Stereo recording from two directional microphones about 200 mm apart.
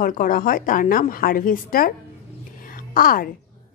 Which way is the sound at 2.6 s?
45° left (ahead or behind).